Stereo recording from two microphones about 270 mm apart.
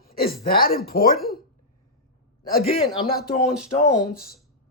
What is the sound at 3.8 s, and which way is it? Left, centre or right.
Speech, left.